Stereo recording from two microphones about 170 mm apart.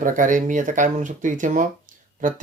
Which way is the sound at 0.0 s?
50° right (ahead or behind).